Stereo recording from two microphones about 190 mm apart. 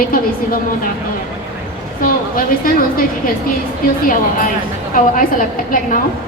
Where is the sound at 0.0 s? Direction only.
50° left (ahead or behind).